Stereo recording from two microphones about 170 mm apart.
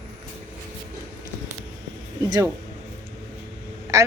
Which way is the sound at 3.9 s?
20° right (ahead or behind).